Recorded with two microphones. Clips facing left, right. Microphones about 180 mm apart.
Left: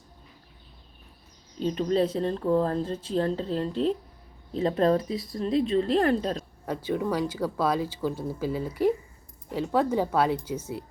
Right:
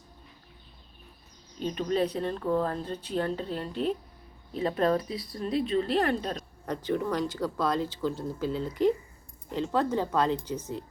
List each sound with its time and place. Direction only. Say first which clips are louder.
1.5 s a woman's voice: left 3 dB; 30° left (ahead or behind)
6.7 s speech: left 1 dB; 10° left (ahead or behind)